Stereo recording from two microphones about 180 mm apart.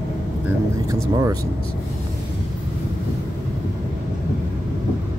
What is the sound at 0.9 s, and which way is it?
Speech, 20° right (ahead or behind).